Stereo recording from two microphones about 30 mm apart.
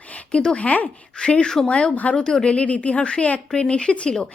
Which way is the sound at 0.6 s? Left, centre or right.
Left.